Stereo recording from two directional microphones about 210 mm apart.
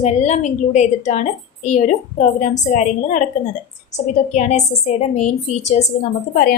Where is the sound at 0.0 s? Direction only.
30° left (ahead or behind).